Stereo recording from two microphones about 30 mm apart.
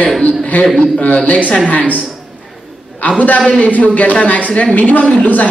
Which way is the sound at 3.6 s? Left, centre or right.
Left.